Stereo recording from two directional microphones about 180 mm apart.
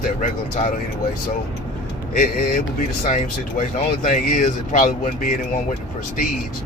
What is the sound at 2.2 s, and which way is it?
Speech, 50° left (ahead or behind).